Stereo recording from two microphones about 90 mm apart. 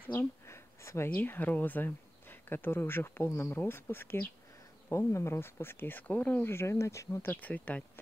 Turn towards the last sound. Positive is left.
turn(degrees=15)  # may be behind; listen again after turning